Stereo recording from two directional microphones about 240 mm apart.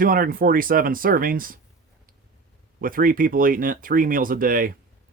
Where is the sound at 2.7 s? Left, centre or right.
Right.